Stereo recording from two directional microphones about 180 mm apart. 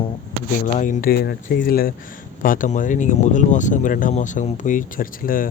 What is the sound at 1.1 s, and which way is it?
Speech, 60° left (ahead or behind).